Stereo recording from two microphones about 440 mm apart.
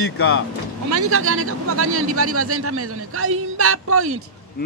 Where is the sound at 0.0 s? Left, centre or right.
Left.